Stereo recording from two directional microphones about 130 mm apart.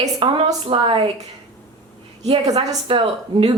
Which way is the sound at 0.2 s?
45° right (ahead or behind).